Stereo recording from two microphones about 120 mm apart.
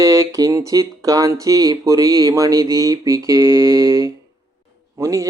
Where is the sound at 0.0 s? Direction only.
30° right (ahead or behind).